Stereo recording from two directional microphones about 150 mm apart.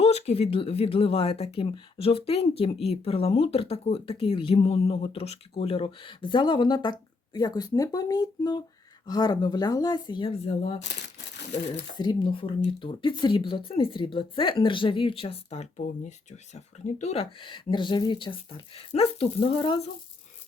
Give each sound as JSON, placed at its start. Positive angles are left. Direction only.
{"t": 0.0, "sound": "speech", "side_deg": 45}
{"t": 11.9, "sound": "speech", "side_deg": 30}